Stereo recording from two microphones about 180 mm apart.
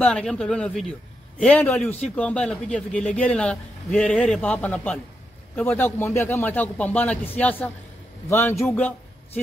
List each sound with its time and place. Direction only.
0.0 s a man's voice: 5° left (ahead or behind)